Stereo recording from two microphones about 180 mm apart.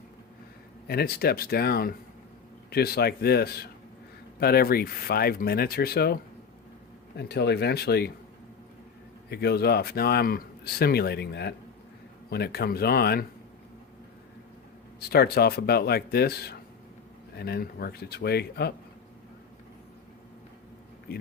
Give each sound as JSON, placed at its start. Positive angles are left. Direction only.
{"t": 0.9, "sound": "a man's voice", "side_deg": 60}
{"t": 7.2, "sound": "a man's voice", "side_deg": 65}
{"t": 9.3, "sound": "a man's voice", "side_deg": 60}
{"t": 15.1, "sound": "a man's voice", "side_deg": 60}